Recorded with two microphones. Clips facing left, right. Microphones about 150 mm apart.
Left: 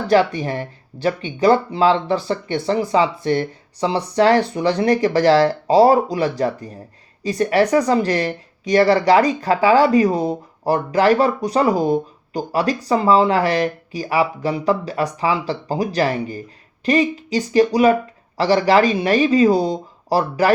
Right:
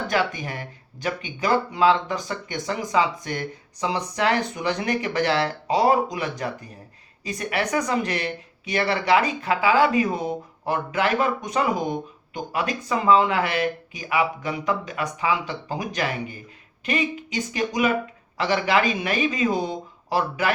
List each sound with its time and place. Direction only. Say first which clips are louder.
0.1 s speech: left 11 dB; 35° left (ahead or behind)